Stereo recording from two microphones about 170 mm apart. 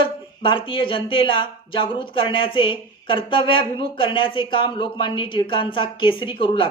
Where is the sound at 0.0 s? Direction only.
30° left (ahead or behind).